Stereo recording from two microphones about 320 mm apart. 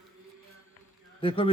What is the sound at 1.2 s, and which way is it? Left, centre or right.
Speech, centre.